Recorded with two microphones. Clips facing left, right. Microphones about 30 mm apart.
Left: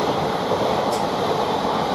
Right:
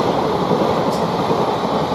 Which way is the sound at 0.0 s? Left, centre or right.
Right.